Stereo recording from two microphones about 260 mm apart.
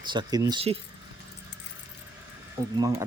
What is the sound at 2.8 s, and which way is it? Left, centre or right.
Speech, centre.